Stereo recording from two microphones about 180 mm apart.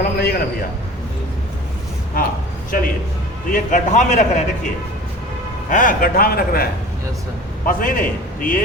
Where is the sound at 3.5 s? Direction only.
45° left (ahead or behind).